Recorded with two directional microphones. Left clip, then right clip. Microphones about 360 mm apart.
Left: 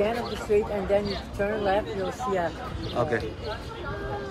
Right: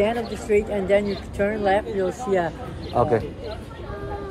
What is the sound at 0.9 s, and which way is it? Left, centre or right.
Speech, right.